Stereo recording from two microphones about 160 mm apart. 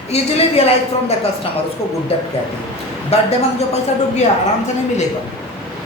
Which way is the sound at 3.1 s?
40° left (ahead or behind).